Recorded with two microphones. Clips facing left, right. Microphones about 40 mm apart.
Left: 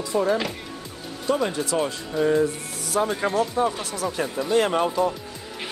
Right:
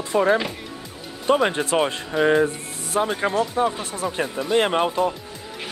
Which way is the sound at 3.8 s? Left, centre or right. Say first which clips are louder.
Right 1 dB; right.